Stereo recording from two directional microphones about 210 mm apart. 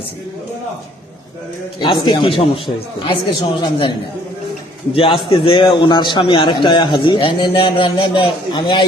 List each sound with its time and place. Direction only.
1.8 s a man's voice: 25° left (ahead or behind)
4.9 s a man's voice: 25° left (ahead or behind)